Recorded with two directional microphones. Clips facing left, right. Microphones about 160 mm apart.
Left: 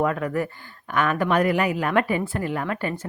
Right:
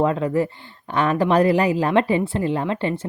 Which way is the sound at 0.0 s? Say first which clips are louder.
Right 4 dB; 25° right (ahead or behind).